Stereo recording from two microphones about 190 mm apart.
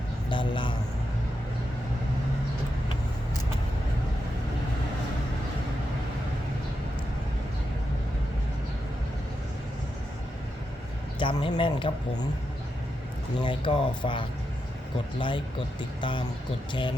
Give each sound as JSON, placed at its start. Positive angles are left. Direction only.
{"t": 0.3, "sound": "speech", "side_deg": 25}
{"t": 11.2, "sound": "speech", "side_deg": 25}
{"t": 13.4, "sound": "speech", "side_deg": 25}